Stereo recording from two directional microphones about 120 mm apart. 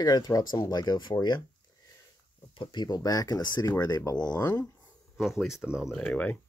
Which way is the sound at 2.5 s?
35° left (ahead or behind).